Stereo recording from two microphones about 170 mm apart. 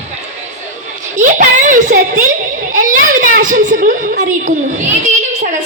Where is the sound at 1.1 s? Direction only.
45° right (ahead or behind).